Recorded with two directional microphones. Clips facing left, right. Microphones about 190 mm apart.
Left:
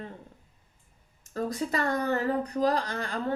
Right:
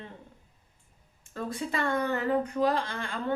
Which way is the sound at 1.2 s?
40° left (ahead or behind).